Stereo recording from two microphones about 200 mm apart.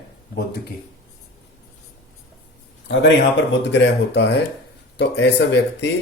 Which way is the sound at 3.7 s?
65° left (ahead or behind).